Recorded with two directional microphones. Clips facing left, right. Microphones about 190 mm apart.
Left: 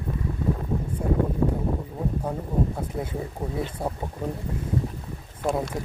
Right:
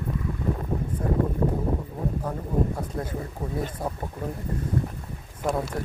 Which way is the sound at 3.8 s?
25° left (ahead or behind).